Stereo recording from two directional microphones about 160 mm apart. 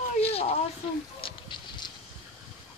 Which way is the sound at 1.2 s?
30° left (ahead or behind).